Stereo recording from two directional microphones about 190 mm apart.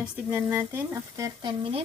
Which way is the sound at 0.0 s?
10° right (ahead or behind).